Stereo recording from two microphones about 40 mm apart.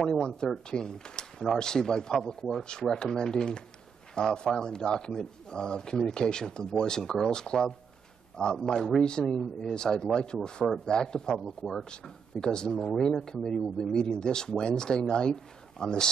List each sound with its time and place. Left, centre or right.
0.0 s speech: centre
0.7 s speech: centre
11.3 s speech: centre
11.9 s speech: centre